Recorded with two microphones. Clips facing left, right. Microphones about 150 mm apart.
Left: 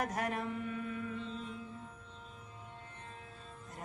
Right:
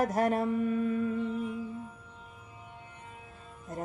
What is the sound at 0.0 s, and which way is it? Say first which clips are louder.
Music: right 9 dB; 35° right (ahead or behind).